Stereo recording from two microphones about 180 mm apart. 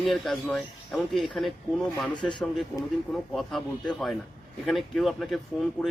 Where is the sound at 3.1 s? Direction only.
Centre (ahead or behind).